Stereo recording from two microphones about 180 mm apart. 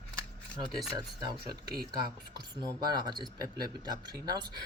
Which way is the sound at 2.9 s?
25° right (ahead or behind).